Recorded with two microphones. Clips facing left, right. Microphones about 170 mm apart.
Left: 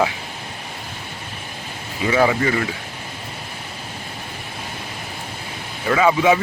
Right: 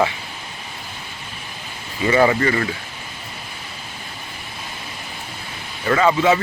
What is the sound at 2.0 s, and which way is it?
Speech, centre (ahead or behind).